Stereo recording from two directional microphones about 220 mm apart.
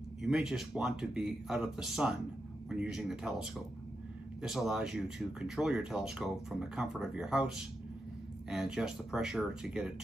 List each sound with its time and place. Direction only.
0.2 s speech: centre (ahead or behind)